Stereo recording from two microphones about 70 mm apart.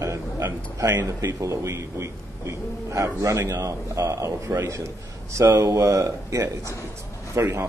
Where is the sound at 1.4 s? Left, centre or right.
Right.